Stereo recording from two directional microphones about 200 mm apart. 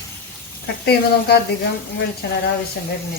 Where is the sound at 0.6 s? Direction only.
55° left (ahead or behind).